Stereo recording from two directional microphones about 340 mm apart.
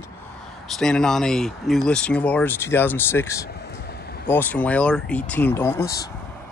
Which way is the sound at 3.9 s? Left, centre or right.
Left.